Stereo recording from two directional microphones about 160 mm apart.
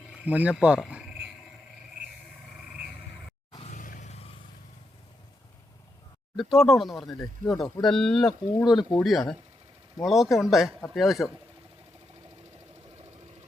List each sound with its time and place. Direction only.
0.1 s speech: 10° right (ahead or behind)
3.7 s music: 55° left (ahead or behind)
6.4 s speech: centre (ahead or behind)